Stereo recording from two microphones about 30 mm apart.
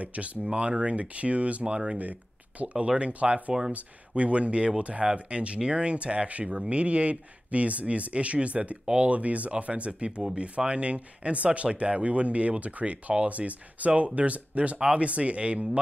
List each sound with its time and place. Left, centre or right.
0.0 s speech: right
0.5 s speech: right
3.0 s speech: right
6.4 s speech: right